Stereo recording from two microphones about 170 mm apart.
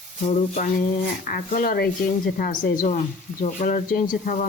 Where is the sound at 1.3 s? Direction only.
55° left (ahead or behind).